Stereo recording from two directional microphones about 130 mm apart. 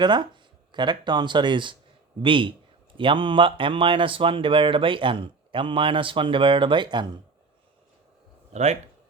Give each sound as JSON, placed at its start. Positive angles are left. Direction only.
{"t": 0.0, "sound": "speech", "side_deg": -35}
{"t": 8.5, "sound": "speech", "side_deg": -60}